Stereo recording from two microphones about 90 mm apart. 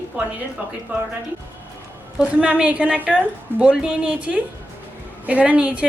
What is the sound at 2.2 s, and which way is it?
A woman's voice, 10° right (ahead or behind).